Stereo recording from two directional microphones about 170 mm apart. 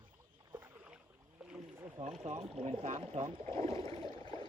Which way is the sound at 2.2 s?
35° right (ahead or behind).